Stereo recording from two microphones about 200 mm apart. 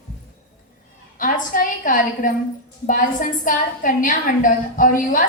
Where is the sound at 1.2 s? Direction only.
40° left (ahead or behind).